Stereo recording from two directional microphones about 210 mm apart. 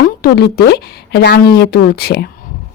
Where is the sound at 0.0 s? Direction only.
50° left (ahead or behind).